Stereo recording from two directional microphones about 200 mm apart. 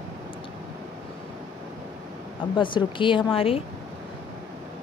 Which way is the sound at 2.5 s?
25° left (ahead or behind).